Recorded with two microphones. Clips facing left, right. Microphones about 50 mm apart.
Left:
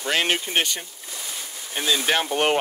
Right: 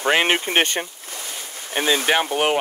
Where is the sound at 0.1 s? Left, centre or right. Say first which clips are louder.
Right 4 dB; right.